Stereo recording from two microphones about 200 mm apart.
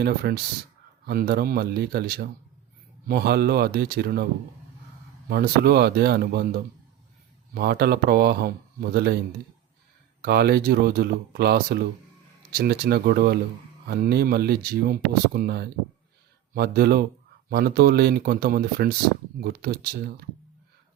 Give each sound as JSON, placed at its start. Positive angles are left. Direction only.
{"t": 0.0, "sound": "speech", "side_deg": -55}
{"t": 5.3, "sound": "speech", "side_deg": -50}